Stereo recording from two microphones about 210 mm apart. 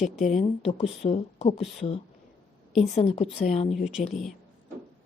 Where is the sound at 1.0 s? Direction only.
30° left (ahead or behind).